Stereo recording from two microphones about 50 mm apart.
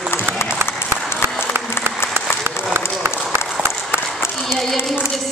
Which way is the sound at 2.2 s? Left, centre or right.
Right.